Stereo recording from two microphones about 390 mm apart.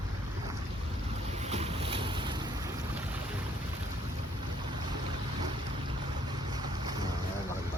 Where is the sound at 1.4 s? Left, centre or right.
Centre.